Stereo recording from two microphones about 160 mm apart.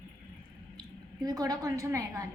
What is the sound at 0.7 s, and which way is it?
A woman's voice, 25° right (ahead or behind).